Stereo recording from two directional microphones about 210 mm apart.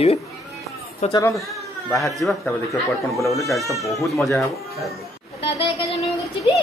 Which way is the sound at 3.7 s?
Centre (ahead or behind).